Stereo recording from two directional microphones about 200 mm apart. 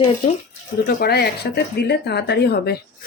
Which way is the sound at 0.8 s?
55° left (ahead or behind).